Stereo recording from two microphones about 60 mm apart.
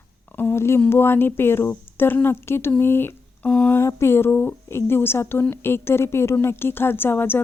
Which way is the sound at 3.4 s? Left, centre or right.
Left.